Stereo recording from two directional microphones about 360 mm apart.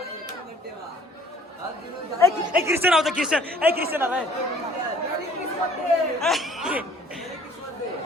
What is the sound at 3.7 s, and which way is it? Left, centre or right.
Speech, right.